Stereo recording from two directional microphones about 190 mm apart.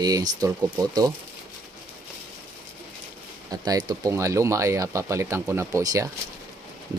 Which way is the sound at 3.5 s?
20° right (ahead or behind).